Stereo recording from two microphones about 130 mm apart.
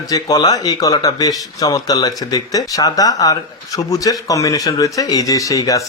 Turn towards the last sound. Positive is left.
turn(degrees=25)  # may be behind; listen again after turning